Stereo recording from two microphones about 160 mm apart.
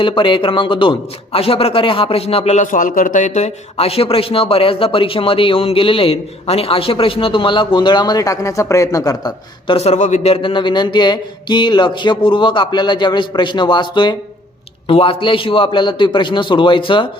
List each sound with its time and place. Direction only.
0.0 s a man's voice: 30° left (ahead or behind)
9.7 s a man's voice: 45° left (ahead or behind)